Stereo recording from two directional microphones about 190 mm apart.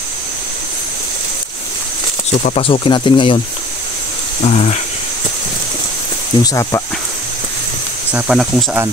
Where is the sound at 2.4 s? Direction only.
30° left (ahead or behind).